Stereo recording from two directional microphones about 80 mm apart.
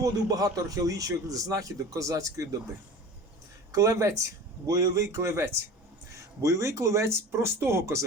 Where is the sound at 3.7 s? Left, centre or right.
Right.